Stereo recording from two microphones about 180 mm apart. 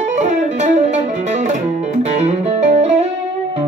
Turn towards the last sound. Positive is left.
turn(degrees=-40)  # may be behind; listen again after turning